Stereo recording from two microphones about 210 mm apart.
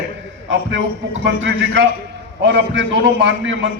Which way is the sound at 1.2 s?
60° right (ahead or behind).